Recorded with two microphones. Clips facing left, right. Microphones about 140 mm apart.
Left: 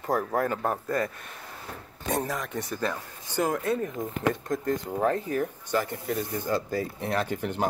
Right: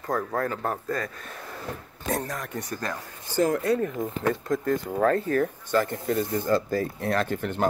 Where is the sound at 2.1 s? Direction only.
5° left (ahead or behind).